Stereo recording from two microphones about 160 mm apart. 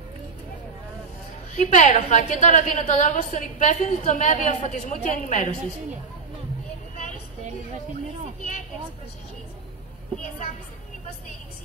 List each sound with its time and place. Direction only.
1.5 s a woman's voice: 50° left (ahead or behind)